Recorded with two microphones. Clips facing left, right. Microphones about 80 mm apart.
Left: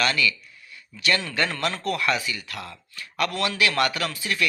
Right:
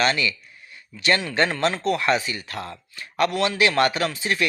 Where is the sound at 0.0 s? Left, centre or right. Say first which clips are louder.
Right 2 dB; right.